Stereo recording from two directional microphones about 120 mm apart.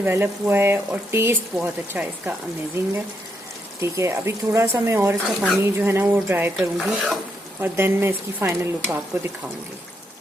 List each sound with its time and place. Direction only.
0.0 s speech: 20° right (ahead or behind)
3.8 s speech: 25° right (ahead or behind)
5.2 s stir: centre (ahead or behind)
5.6 s speech: 20° right (ahead or behind)
6.6 s stir: centre (ahead or behind)
7.6 s speech: 20° right (ahead or behind)